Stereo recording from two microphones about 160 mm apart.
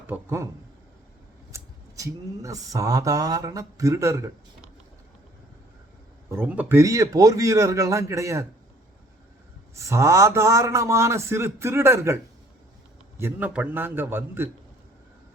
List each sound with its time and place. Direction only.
0.1 s a man's voice: 15° right (ahead or behind)
1.5 s speech: 20° right (ahead or behind)
6.3 s speech: 10° right (ahead or behind)
9.7 s a man's voice: 20° right (ahead or behind)